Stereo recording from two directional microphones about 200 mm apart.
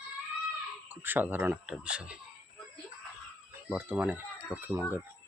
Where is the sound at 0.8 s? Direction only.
10° right (ahead or behind).